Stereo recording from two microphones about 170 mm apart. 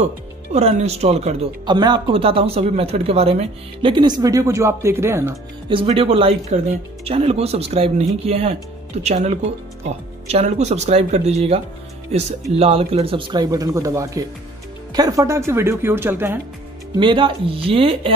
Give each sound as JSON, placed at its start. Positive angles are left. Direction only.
{"t": 0.0, "sound": "speech", "side_deg": -40}
{"t": 1.7, "sound": "speech", "side_deg": -25}
{"t": 5.7, "sound": "speech", "side_deg": -30}
{"t": 17.0, "sound": "speech", "side_deg": -30}